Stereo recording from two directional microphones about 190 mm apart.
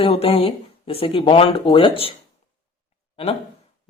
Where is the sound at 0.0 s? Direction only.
30° left (ahead or behind).